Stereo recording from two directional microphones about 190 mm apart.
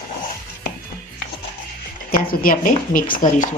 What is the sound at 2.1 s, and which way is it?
Speech, 50° left (ahead or behind).